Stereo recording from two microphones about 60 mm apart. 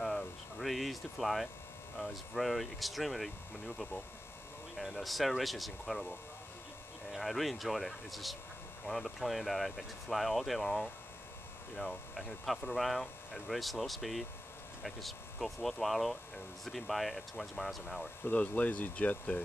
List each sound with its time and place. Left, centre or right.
0.6 s a sound: centre
2.3 s speech: centre
7.1 s speech: centre
18.2 s speech: left